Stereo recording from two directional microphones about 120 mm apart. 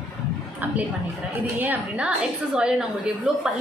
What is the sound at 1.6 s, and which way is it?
A woman's voice, 15° right (ahead or behind).